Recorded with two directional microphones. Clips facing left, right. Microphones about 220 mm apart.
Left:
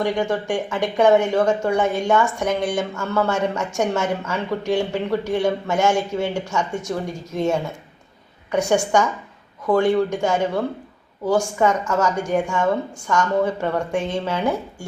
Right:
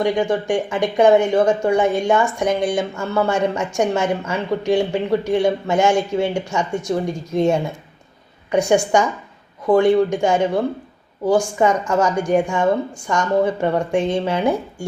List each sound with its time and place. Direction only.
0.0 s speech: 15° right (ahead or behind)